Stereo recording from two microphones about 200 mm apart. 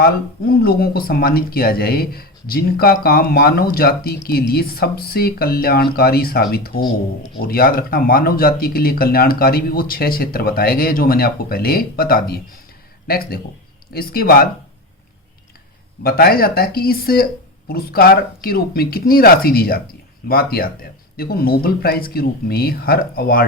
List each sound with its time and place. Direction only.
0.0 s speech: 50° left (ahead or behind)
16.0 s speech: 50° left (ahead or behind)